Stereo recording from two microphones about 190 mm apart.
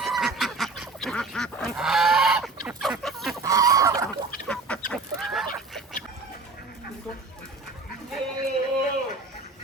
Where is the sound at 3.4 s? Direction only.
20° right (ahead or behind).